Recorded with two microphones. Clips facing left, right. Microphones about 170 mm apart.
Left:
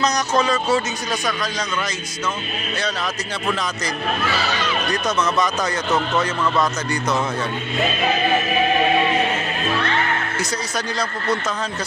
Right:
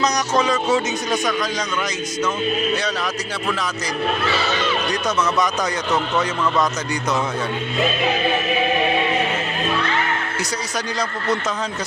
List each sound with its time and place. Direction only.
0.0 s speech: 15° right (ahead or behind)